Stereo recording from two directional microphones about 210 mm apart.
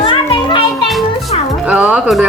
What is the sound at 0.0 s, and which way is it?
Children playing, 25° left (ahead or behind).